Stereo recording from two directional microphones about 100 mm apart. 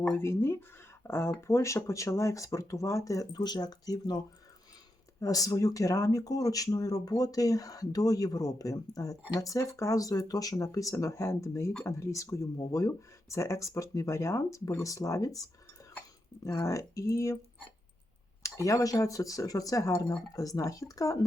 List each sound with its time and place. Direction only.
0.1 s speech: 25° left (ahead or behind); by 4.2 s 40° left (ahead or behind)
5.2 s speech: 35° left (ahead or behind)
18.4 s speech: 30° left (ahead or behind)